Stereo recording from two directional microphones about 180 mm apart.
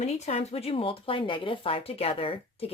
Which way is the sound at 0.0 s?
35° left (ahead or behind).